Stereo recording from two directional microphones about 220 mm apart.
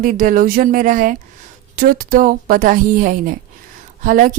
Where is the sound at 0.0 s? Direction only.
40° right (ahead or behind).